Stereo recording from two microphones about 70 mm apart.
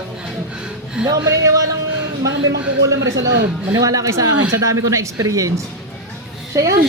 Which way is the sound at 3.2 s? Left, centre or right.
Right.